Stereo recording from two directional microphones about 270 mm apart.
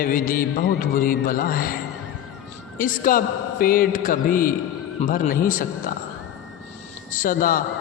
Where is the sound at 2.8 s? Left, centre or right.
Left.